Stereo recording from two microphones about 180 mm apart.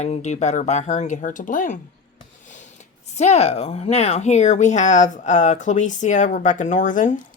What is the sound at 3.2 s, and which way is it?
Speech, 35° left (ahead or behind).